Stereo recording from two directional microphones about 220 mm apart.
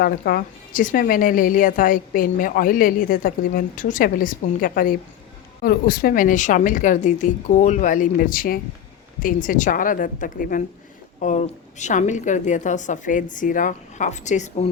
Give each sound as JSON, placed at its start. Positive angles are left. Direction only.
{"t": 0.0, "sound": "speech", "side_deg": 40}